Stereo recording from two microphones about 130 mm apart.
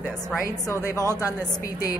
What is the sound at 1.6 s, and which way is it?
Speech, 30° left (ahead or behind).